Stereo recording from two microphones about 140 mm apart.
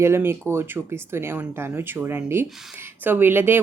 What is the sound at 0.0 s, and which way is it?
A woman's voice, 15° right (ahead or behind).